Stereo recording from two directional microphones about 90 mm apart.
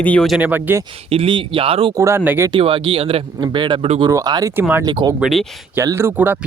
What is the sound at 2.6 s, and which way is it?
Speech, 70° right (ahead or behind).